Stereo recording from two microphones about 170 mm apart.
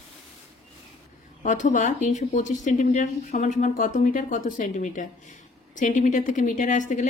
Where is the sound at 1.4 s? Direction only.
45° left (ahead or behind).